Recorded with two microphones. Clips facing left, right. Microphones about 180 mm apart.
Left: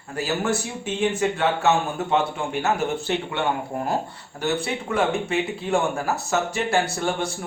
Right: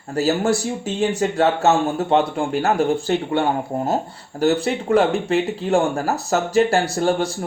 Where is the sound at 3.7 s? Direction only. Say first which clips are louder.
Right 4 dB; 25° right (ahead or behind).